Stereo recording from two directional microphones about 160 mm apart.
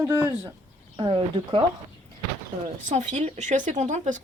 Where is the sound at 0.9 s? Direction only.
30° right (ahead or behind).